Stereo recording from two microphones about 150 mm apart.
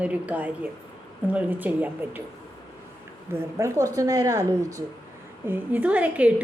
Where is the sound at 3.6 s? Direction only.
20° right (ahead or behind).